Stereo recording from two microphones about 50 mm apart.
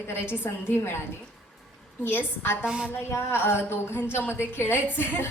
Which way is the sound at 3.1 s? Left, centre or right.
Left.